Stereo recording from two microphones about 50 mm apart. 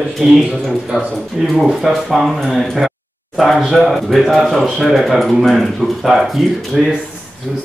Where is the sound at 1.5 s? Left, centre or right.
Centre.